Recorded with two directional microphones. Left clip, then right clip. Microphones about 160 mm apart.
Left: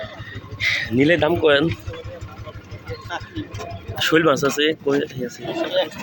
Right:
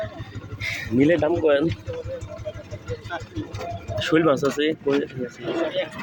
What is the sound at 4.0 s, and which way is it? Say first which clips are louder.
Speech: left 3 dB; centre (ahead or behind).